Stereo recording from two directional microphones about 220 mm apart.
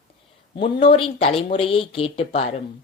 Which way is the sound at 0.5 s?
25° left (ahead or behind).